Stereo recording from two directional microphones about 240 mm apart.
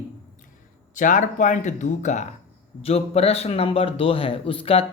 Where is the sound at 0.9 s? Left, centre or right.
Left.